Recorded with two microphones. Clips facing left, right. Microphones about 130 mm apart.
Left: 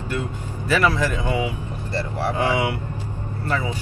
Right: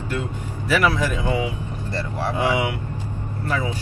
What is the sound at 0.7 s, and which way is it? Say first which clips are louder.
Speech: even; 10° right (ahead or behind).